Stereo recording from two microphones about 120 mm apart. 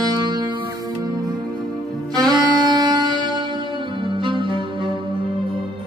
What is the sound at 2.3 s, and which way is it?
Music, 35° right (ahead or behind).